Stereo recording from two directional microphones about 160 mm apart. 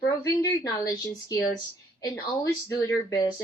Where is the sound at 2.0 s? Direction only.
20° left (ahead or behind).